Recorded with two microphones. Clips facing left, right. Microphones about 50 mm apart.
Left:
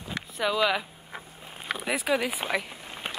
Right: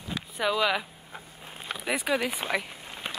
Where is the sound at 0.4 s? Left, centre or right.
Centre.